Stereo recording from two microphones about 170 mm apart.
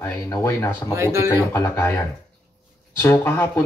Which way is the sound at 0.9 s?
15° right (ahead or behind).